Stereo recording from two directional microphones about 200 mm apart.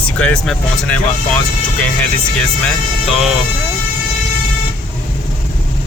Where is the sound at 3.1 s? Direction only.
Centre (ahead or behind).